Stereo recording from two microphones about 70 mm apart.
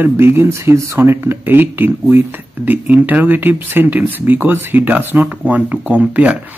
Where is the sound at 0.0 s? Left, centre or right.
Right.